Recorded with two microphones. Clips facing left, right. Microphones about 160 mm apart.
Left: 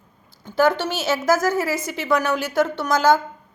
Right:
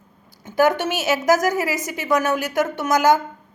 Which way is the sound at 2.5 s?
15° right (ahead or behind).